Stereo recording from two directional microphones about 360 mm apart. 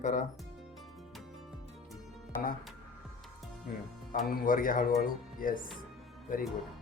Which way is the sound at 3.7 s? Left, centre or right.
Left.